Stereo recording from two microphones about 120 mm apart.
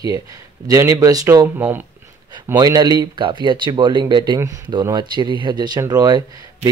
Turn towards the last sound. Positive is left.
turn(degrees=-30)  # may be behind; listen again after turning